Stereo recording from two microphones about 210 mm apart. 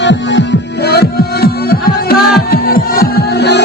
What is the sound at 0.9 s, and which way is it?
Music, 50° left (ahead or behind).